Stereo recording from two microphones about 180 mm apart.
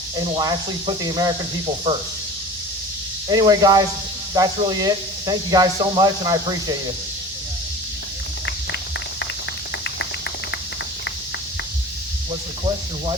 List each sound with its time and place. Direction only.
0.3 s speech: 20° right (ahead or behind)
3.2 s speech: 20° right (ahead or behind)
8.4 s a sound: 75° left (ahead or behind)